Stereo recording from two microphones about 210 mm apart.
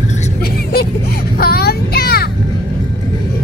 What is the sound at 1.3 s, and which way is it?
Child singing, 45° left (ahead or behind).